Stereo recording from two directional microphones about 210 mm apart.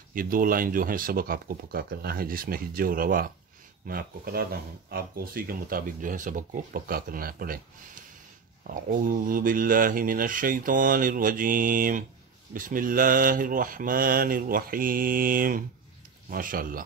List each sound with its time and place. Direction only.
0.1 s speech: 40° right (ahead or behind)